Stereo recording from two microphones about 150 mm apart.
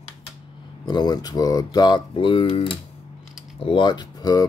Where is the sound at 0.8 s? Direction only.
25° left (ahead or behind).